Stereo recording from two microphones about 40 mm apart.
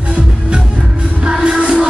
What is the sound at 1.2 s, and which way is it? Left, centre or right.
Music, right.